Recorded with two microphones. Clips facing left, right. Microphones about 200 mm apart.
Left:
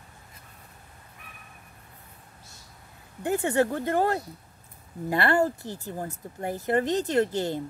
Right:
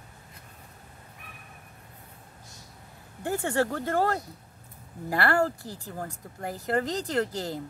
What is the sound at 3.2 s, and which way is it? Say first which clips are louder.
Speech: left 3 dB; 20° left (ahead or behind).